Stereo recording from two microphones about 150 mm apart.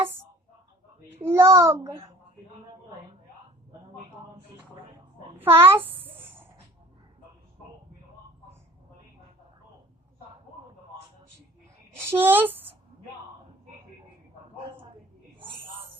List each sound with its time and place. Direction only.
1.2 s a child's voice: 20° right (ahead or behind)
5.4 s a sound: 15° right (ahead or behind)
11.9 s speech: 15° right (ahead or behind)